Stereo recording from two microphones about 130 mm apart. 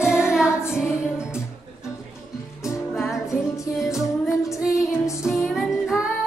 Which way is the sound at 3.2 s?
25° left (ahead or behind).